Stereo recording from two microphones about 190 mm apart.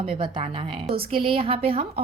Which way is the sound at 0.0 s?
25° right (ahead or behind).